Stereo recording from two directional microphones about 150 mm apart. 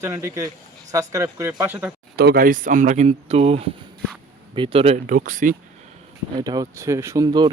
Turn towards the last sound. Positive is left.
turn(degrees=-30)  # may be behind; listen again after turning